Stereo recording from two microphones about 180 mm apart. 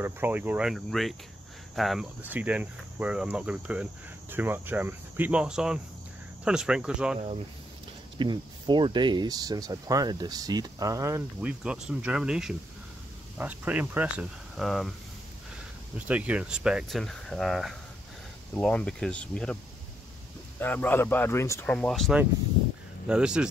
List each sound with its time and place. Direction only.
0.0 s speech: 10° right (ahead or behind)
8.2 s speech: 25° right (ahead or behind)
11.6 s speech: 5° right (ahead or behind)
16.1 s speech: 5° right (ahead or behind)